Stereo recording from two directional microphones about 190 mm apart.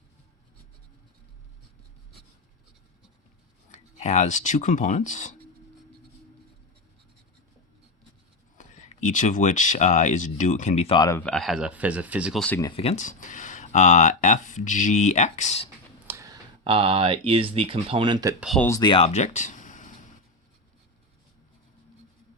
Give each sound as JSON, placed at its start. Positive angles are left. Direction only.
{"t": 3.7, "sound": "speech", "side_deg": 40}
{"t": 8.5, "sound": "speech", "side_deg": 40}
{"t": 11.2, "sound": "speech", "side_deg": 5}
{"t": 12.5, "sound": "speech", "side_deg": 20}
{"t": 12.8, "sound": "speech", "side_deg": 35}
{"t": 16.0, "sound": "speech", "side_deg": -15}
{"t": 18.3, "sound": "speech", "side_deg": 0}
{"t": 18.8, "sound": "speech", "side_deg": 25}